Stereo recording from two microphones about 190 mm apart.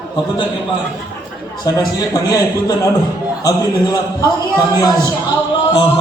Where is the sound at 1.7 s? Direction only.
20° left (ahead or behind).